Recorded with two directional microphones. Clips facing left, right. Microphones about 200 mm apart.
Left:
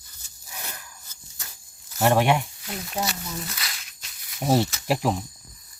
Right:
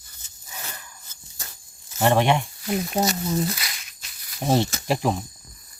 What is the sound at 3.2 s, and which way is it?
Speech, 30° right (ahead or behind).